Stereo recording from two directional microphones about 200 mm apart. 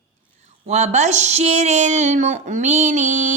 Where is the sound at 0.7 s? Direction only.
35° right (ahead or behind).